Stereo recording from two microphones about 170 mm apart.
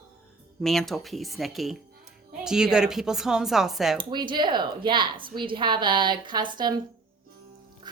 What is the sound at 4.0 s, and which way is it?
A woman's voice, 25° right (ahead or behind).